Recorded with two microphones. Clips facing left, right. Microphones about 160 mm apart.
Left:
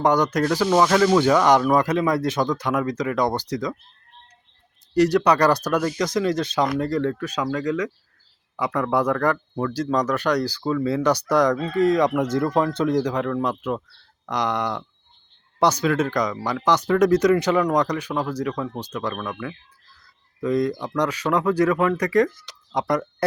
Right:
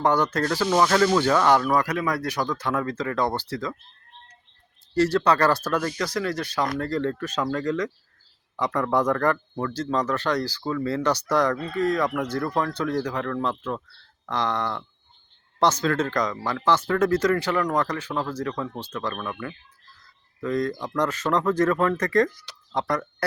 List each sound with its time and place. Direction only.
0.0 s speech: 15° left (ahead or behind)
4.9 s speech: 15° left (ahead or behind)